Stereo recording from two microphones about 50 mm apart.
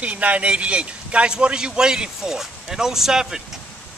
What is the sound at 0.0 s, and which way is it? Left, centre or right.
A man's voice, right.